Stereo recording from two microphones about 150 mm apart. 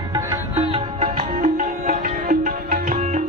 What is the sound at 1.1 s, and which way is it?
Music, 60° right (ahead or behind).